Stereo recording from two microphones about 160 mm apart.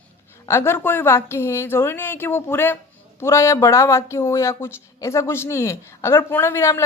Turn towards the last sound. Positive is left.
turn(degrees=15)  # may be behind; listen again after turning